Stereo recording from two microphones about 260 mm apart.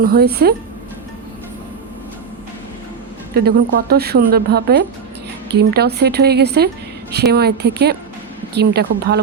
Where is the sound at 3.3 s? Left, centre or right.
Right.